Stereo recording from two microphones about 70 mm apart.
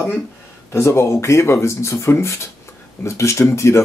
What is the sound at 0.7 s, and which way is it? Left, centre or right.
Speech, left.